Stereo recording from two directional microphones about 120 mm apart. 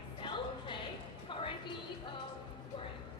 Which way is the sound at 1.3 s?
45° left (ahead or behind).